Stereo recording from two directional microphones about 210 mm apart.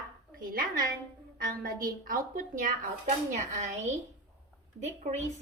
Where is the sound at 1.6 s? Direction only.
45° right (ahead or behind).